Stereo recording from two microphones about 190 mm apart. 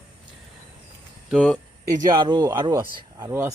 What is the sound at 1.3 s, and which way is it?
Speech, 5° left (ahead or behind).